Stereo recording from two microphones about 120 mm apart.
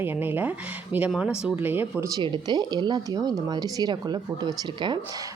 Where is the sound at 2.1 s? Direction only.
40° right (ahead or behind).